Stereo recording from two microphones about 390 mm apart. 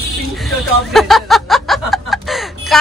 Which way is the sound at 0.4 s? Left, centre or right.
Centre.